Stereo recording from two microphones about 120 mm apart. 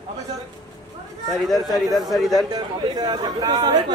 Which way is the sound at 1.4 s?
Centre (ahead or behind).